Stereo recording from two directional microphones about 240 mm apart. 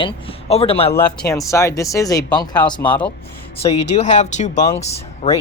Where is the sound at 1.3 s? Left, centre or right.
Centre.